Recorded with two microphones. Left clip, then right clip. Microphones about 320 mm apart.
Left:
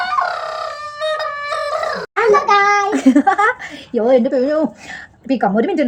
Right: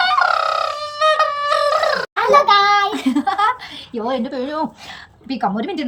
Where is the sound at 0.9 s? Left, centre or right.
Centre.